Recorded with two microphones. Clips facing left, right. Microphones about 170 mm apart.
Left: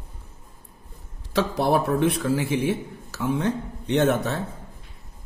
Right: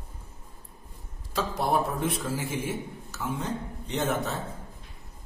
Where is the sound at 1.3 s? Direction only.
70° left (ahead or behind).